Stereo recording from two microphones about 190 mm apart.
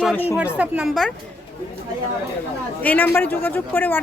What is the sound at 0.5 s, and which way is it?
Speech, 5° right (ahead or behind).